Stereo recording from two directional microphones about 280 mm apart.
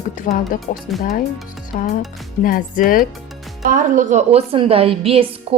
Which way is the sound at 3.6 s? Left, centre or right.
Right.